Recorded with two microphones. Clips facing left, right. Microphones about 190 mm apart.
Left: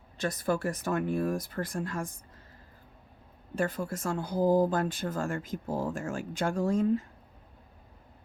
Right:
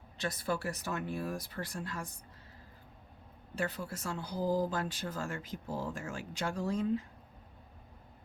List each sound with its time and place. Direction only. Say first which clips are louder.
0.2 s speech: left 6 dB; 50° left (ahead or behind)
3.5 s speech: left 6 dB; 50° left (ahead or behind)